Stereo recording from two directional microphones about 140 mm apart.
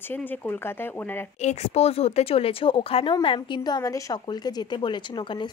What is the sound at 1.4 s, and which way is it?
Speech, 50° left (ahead or behind).